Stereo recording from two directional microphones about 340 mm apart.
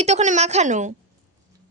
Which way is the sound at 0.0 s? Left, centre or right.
Centre.